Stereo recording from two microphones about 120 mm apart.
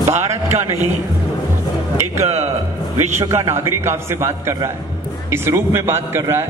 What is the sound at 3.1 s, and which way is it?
A man's voice, 25° right (ahead or behind).